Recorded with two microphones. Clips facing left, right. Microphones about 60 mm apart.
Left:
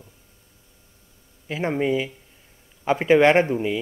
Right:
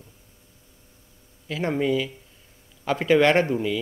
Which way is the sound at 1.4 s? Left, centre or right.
Left.